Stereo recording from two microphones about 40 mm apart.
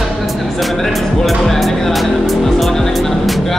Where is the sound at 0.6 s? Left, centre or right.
Centre.